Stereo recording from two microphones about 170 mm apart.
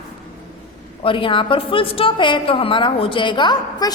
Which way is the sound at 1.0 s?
30° left (ahead or behind).